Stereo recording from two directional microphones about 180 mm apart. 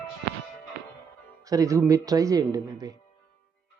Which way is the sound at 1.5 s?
20° right (ahead or behind).